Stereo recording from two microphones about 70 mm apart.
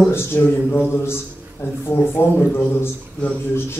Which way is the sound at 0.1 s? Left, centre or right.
Left.